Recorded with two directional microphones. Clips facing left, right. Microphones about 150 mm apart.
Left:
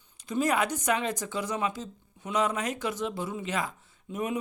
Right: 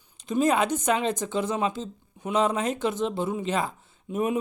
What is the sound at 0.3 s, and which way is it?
Speech, 25° right (ahead or behind).